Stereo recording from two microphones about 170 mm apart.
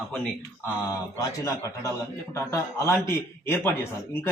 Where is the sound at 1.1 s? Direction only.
20° left (ahead or behind).